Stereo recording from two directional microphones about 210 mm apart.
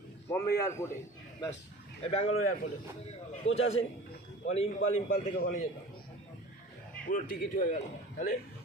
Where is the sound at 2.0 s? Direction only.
30° left (ahead or behind).